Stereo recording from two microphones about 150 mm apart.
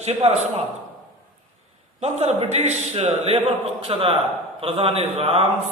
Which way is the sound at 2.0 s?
45° right (ahead or behind).